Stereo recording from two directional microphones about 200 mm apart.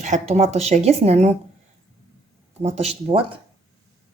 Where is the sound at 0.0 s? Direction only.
35° right (ahead or behind).